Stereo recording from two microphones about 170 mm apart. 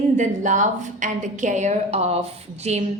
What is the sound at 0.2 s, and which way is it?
A woman's voice, 45° right (ahead or behind).